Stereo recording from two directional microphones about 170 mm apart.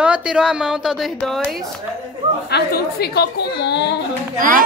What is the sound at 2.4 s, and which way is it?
A woman's voice, 70° left (ahead or behind).